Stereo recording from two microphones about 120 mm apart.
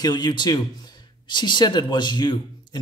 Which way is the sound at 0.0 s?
35° left (ahead or behind).